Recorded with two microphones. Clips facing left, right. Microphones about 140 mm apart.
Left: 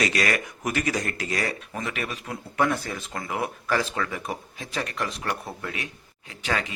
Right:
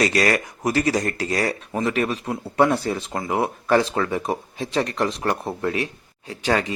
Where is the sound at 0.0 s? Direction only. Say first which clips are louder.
Right 5 dB; 40° right (ahead or behind).